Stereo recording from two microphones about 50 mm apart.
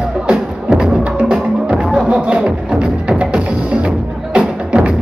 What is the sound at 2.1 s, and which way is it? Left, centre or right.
Music, centre.